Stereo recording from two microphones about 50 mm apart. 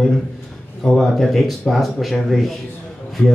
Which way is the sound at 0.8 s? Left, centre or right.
Centre.